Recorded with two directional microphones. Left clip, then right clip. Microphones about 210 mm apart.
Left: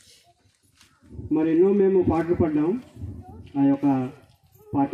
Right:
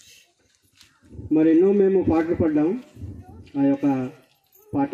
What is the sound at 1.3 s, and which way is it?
A man's voice, 45° left (ahead or behind).